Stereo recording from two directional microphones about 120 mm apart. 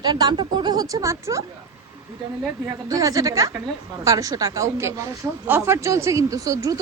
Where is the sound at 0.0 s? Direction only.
35° right (ahead or behind).